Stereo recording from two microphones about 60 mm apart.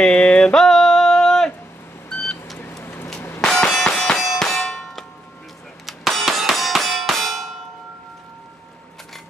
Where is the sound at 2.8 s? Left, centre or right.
Left.